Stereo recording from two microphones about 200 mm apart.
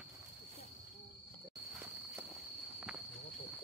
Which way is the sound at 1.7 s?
5° right (ahead or behind).